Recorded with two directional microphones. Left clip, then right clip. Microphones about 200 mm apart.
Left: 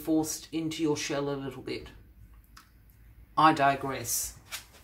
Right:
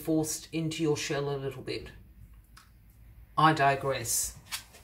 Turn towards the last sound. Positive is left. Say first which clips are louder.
# right 2 dB
turn(degrees=25)  # may be behind; listen again after turning